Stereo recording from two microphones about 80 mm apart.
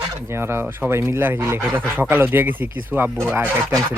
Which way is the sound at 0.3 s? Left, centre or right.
Right.